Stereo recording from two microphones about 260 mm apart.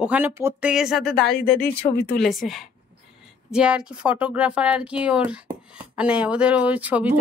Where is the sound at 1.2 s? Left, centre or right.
Left.